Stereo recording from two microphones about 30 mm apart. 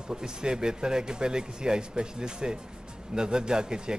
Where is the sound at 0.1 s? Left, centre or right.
Right.